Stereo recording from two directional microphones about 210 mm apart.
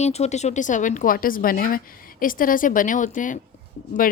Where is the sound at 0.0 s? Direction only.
30° left (ahead or behind).